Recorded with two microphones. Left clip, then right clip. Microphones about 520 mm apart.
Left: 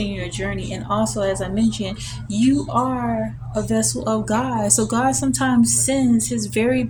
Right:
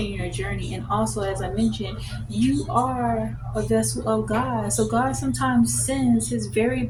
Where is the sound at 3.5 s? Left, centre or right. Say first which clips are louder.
Left 1 dB; centre.